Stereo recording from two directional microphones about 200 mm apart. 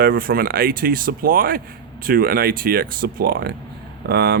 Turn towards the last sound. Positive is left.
turn(degrees=-55)  # may be behind; listen again after turning